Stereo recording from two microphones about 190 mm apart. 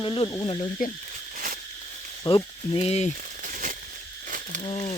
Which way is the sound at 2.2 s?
30° left (ahead or behind).